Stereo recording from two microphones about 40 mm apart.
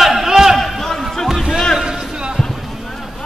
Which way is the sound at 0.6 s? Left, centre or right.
Centre.